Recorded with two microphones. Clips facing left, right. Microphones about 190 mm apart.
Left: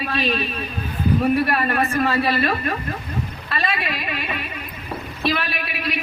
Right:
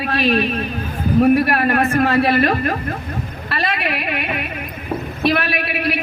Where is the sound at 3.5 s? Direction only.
65° right (ahead or behind).